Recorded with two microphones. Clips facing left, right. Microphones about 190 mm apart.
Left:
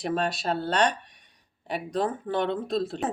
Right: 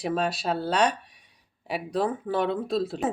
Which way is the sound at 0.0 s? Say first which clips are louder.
Right 1 dB; 5° right (ahead or behind).